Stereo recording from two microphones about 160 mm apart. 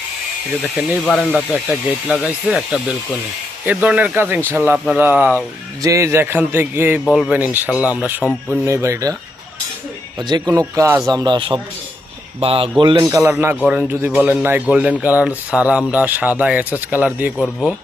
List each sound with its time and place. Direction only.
0.6 s speech: 5° right (ahead or behind)
7.0 s speech: centre (ahead or behind); by 9.1 s 20° right (ahead or behind)
10.2 s speech: 25° right (ahead or behind); by 17.4 s 10° right (ahead or behind)
17.4 s speech: 5° left (ahead or behind)